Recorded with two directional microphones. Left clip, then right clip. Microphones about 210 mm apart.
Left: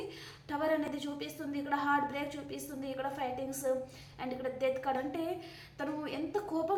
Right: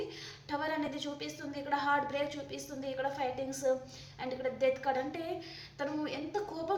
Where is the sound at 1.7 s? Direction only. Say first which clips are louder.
Right 1 dB; 25° left (ahead or behind).